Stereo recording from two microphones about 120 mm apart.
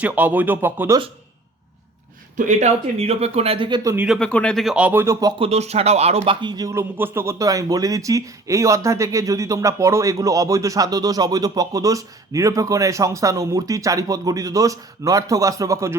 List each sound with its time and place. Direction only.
0.0 s speech: 15° right (ahead or behind)
2.3 s speech: 90° right; by 3.7 s 55° right (ahead or behind)
4.2 s speech: 10° left (ahead or behind)
4.9 s speech: 20° right (ahead or behind)
5.4 s speech: 60° right (ahead or behind)
6.4 s speech: 35° right (ahead or behind)
6.7 s speech: 20° right (ahead or behind)